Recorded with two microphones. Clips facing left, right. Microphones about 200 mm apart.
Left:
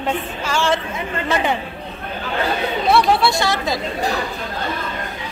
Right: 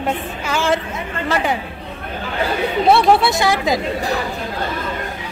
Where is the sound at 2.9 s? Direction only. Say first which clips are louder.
Even; 20° right (ahead or behind).